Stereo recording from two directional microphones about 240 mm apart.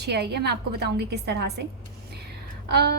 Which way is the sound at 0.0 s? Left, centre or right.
Right.